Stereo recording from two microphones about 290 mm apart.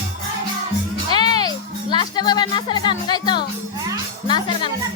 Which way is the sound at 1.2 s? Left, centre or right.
Centre.